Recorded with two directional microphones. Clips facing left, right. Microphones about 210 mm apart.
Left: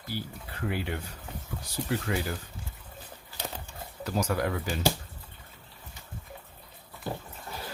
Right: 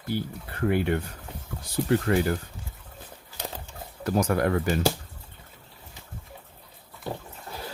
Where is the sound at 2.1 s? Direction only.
55° right (ahead or behind).